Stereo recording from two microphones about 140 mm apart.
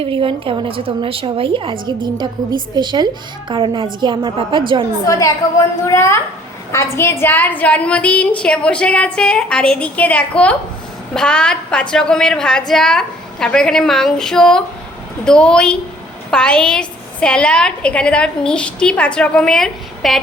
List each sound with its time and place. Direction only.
0.0 s a woman's voice: 40° right (ahead or behind)
5.0 s a woman's voice: 25° left (ahead or behind); by 20.1 s centre (ahead or behind)